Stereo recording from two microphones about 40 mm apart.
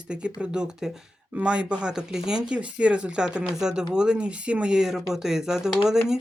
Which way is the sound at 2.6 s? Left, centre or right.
Right.